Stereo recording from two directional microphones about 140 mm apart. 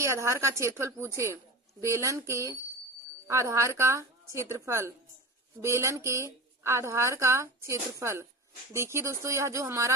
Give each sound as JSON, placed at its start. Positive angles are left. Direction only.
{"t": 0.0, "sound": "a woman's voice", "side_deg": -20}